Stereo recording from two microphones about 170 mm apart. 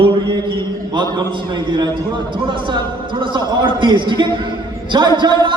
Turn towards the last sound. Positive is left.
turn(degrees=-25)  # may be behind; listen again after turning